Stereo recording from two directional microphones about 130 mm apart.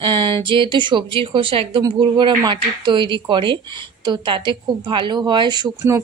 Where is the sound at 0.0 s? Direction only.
40° right (ahead or behind).